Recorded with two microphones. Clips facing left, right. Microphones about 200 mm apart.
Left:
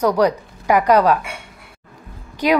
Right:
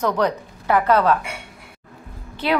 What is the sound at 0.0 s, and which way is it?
Speech, 10° left (ahead or behind).